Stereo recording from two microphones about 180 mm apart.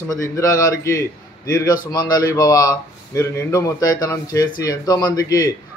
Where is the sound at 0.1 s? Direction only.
20° left (ahead or behind).